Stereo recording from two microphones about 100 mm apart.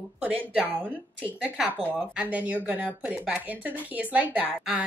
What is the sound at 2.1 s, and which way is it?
A woman's voice, 15° right (ahead or behind).